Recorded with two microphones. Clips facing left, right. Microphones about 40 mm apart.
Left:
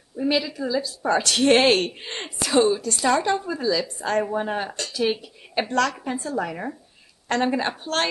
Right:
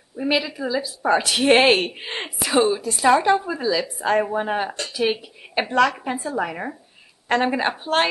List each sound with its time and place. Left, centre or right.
0.2 s a woman's voice: centre